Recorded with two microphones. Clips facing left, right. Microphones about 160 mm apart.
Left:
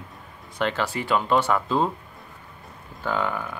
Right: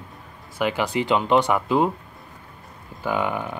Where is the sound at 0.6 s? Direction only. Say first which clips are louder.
Right 3 dB; 10° right (ahead or behind).